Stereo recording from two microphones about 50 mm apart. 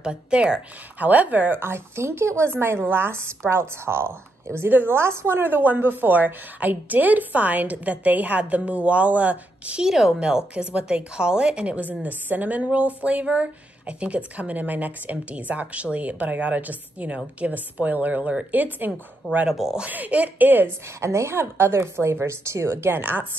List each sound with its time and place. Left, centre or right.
0.0 s speech: centre
0.9 s a woman's voice: right
1.6 s a woman's voice: right
2.9 s a woman's voice: right
4.6 s a woman's voice: right
4.9 s a woman's voice: right
9.8 s a woman's voice: centre; by 18.9 s right
19.5 s speech: centre
19.9 s a woman's voice: right
21.0 s a woman's voice: right
21.4 s a woman's voice: right